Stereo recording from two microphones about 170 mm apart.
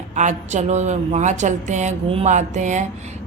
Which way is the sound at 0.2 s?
45° right (ahead or behind).